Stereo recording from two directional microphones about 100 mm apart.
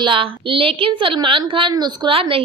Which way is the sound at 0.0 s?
60° right (ahead or behind).